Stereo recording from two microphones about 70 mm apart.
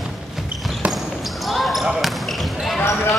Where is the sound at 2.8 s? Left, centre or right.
Left.